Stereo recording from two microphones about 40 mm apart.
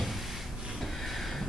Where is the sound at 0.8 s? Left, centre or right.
Centre.